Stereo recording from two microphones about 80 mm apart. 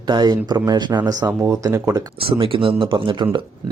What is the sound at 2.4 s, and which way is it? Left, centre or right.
Speech, right.